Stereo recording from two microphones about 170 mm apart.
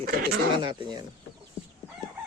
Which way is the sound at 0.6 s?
25° right (ahead or behind).